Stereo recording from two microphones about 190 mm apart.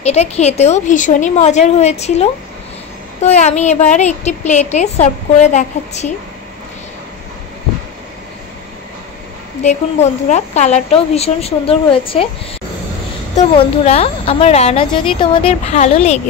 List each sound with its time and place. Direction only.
0.0 s speech: 35° left (ahead or behind)
9.6 s speech: 35° left (ahead or behind)
13.3 s speech: 35° left (ahead or behind)